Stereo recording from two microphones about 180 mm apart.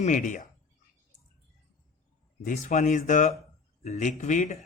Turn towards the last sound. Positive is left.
turn(degrees=45)  # may be behind; listen again after turning